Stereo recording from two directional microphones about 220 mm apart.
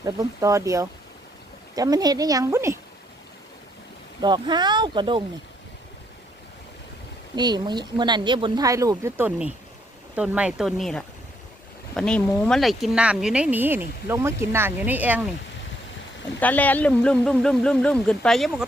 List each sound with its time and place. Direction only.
0.0 s speech: 15° right (ahead or behind)
4.2 s speech: 20° right (ahead or behind)
7.3 s speech: 20° right (ahead or behind)
16.4 s speech: 5° left (ahead or behind)